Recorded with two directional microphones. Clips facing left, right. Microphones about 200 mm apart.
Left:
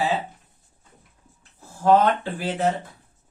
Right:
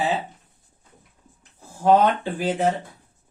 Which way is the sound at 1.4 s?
15° right (ahead or behind).